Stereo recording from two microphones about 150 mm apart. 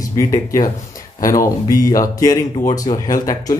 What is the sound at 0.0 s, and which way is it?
Speech, 20° left (ahead or behind).